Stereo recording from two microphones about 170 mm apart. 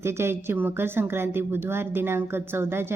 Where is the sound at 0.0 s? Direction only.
15° right (ahead or behind).